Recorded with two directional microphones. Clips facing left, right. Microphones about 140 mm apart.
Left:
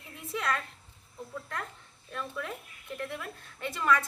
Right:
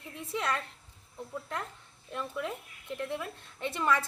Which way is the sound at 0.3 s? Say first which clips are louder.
Even; 25° right (ahead or behind).